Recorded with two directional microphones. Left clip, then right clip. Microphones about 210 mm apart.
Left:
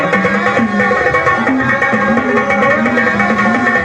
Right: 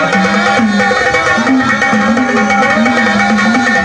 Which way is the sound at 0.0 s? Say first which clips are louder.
Right 2 dB; 55° right (ahead or behind).